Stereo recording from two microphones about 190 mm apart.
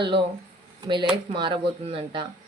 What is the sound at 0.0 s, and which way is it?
A woman's voice, 25° right (ahead or behind).